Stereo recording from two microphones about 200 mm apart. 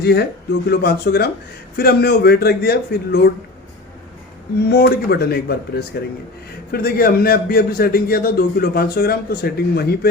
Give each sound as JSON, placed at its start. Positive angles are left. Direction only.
{"t": 0.0, "sound": "a man's voice", "side_deg": 55}
{"t": 4.6, "sound": "a man's voice", "side_deg": 50}